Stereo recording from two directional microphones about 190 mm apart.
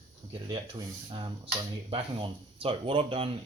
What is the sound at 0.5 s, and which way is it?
Speech, 25° right (ahead or behind).